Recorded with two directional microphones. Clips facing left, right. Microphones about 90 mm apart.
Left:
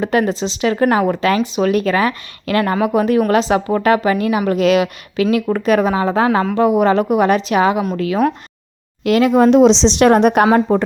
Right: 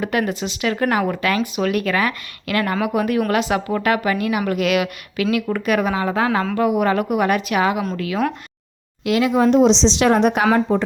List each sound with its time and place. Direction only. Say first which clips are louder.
0.0 s speech: left 5 dB; 30° left (ahead or behind)
9.0 s speech: left 5 dB; 50° left (ahead or behind)
9.5 s speech: left 4 dB; 90° left; by 10.8 s 50° left (ahead or behind)